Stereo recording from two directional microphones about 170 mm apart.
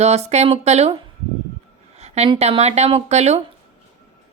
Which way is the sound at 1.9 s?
40° right (ahead or behind).